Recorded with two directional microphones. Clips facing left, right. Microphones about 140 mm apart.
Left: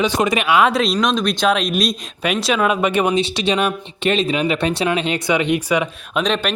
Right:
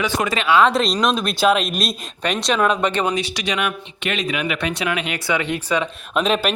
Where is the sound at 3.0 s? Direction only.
25° left (ahead or behind).